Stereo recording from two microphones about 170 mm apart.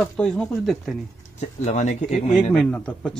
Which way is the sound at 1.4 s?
45° left (ahead or behind).